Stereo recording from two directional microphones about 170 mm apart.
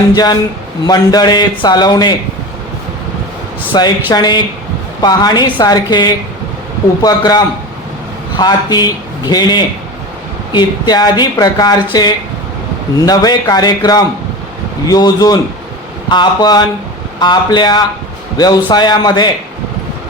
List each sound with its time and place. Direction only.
0.1 s a man's voice: 25° left (ahead or behind)
3.7 s a man's voice: 25° left (ahead or behind)
13.1 s a man's voice: 25° left (ahead or behind)